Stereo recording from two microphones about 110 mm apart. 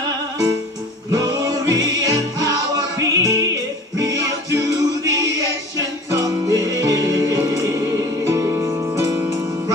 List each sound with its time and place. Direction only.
1.1 s music: 35° right (ahead or behind)